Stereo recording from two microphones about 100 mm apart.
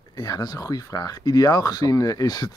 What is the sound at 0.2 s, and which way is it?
Speech, 40° left (ahead or behind).